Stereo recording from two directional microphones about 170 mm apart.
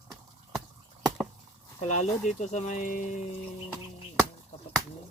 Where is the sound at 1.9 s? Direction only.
40° left (ahead or behind).